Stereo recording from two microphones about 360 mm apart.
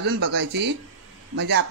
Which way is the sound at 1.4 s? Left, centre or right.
Right.